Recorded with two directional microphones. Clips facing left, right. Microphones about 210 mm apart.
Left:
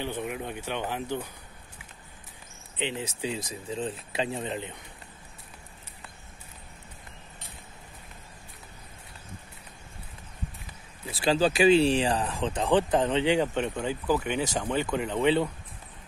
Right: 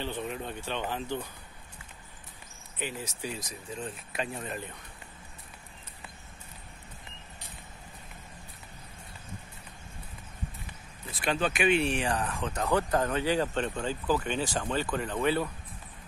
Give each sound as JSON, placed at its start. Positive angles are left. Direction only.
{"t": 0.0, "sound": "speech", "side_deg": 15}
{"t": 2.8, "sound": "speech", "side_deg": 25}
{"t": 11.1, "sound": "speech", "side_deg": 30}
{"t": 12.9, "sound": "speech", "side_deg": 20}